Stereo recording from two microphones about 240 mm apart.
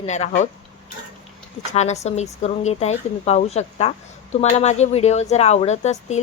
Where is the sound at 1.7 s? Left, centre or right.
Left.